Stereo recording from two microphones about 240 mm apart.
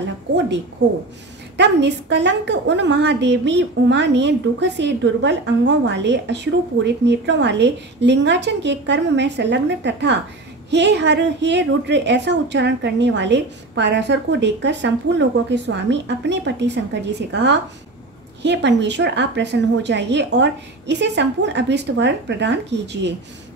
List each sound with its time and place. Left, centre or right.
0.8 s a woman's voice: right